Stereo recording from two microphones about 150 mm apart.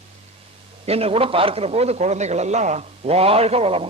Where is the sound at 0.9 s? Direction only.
40° right (ahead or behind).